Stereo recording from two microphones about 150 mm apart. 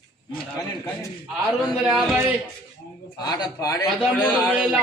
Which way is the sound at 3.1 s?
25° left (ahead or behind).